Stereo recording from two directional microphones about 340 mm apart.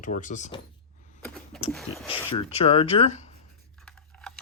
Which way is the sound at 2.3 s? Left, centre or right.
Centre.